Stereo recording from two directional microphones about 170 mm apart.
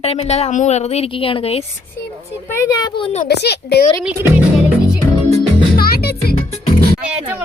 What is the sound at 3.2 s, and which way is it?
Speech, 75° left (ahead or behind).